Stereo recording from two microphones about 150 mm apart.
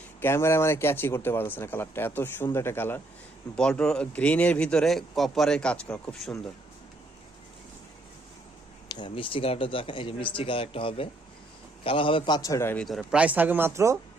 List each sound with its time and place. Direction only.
0.2 s speech: 15° left (ahead or behind)
8.9 s speech: 30° left (ahead or behind)
12.8 s speech: centre (ahead or behind); by 14.0 s 20° right (ahead or behind)